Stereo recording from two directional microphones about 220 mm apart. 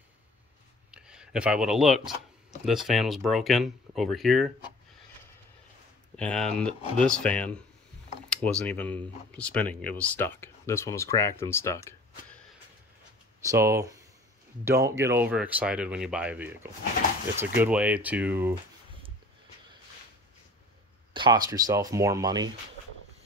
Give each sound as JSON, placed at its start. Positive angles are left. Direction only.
{"t": 0.9, "sound": "speech", "side_deg": -5}
{"t": 6.1, "sound": "speech", "side_deg": 5}
{"t": 13.5, "sound": "speech", "side_deg": -15}
{"t": 21.1, "sound": "speech", "side_deg": -20}